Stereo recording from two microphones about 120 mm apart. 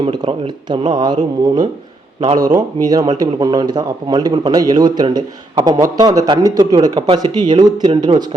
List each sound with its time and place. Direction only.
0.0 s speech: 45° right (ahead or behind)